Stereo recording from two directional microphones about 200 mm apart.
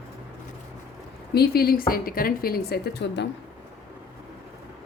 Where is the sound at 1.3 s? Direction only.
50° left (ahead or behind).